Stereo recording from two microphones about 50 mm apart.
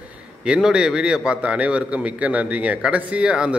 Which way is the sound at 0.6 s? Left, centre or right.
Centre.